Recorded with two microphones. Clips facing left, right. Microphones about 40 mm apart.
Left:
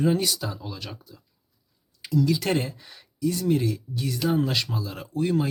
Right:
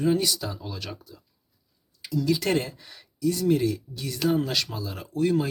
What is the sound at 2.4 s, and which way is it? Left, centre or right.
Speech, centre.